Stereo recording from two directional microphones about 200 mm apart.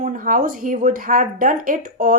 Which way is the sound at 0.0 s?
40° right (ahead or behind).